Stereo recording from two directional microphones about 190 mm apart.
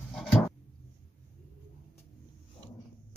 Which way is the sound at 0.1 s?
5° left (ahead or behind).